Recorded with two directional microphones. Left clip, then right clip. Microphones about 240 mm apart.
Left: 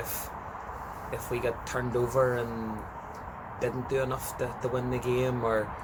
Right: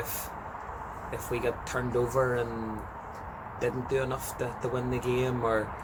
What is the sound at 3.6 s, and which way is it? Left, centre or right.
Speech, centre.